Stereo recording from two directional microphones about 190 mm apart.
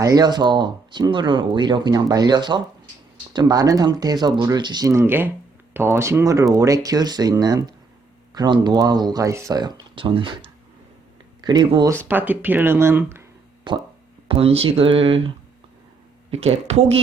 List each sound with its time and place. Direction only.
0.0 s speech: 20° right (ahead or behind)
13.7 s speech: 25° right (ahead or behind)
16.3 s speech: 35° right (ahead or behind)